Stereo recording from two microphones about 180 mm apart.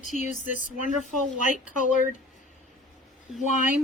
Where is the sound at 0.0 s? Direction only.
40° left (ahead or behind).